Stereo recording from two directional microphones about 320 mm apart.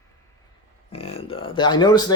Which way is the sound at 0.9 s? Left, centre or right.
Centre.